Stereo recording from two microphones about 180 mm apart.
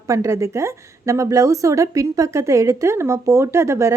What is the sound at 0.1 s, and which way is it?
A woman's voice, 15° right (ahead or behind).